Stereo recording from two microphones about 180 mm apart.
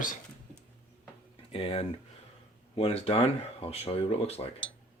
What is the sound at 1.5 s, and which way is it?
Speech, 30° left (ahead or behind).